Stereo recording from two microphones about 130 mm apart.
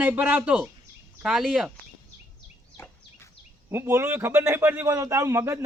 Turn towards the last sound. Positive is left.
turn(degrees=-20)  # may be behind; listen again after turning